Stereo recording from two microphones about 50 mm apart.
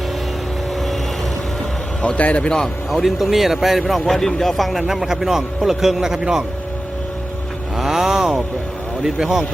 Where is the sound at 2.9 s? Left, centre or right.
Centre.